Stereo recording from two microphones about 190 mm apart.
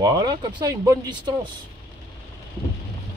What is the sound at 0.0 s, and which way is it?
Speech, 20° right (ahead or behind).